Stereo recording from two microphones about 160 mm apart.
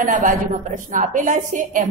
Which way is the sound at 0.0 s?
55° right (ahead or behind).